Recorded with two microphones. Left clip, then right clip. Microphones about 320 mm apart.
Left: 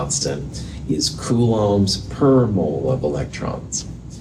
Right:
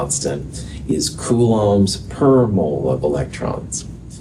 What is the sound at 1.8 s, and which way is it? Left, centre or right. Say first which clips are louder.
Speech: right 2 dB; right.